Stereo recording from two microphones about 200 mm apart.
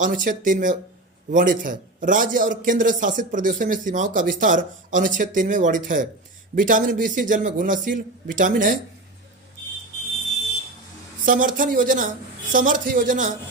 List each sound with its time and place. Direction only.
0.0 s speech: 40° right (ahead or behind)
11.3 s speech: 40° right (ahead or behind)